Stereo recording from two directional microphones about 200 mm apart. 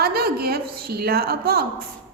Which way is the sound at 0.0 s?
50° right (ahead or behind).